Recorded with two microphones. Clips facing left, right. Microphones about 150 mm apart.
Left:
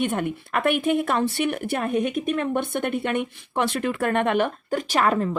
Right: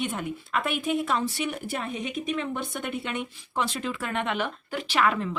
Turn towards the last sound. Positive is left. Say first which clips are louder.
# left 4 dB
turn(degrees=40)  # may be behind; listen again after turning